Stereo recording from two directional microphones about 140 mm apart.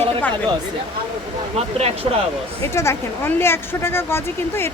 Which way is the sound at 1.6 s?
50° right (ahead or behind).